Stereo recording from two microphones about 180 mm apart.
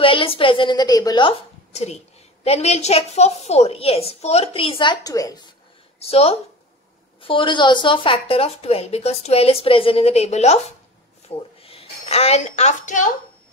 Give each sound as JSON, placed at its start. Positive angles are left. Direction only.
{"t": 0.0, "sound": "a woman's voice", "side_deg": 30}
{"t": 1.7, "sound": "a woman's voice", "side_deg": 35}
{"t": 5.9, "sound": "a woman's voice", "side_deg": 35}